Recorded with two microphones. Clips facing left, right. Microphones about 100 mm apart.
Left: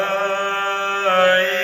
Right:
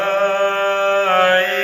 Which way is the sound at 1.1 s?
25° left (ahead or behind).